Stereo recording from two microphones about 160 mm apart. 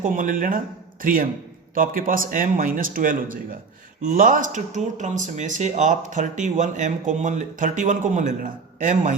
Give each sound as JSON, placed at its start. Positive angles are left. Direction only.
{"t": 0.0, "sound": "speech", "side_deg": -60}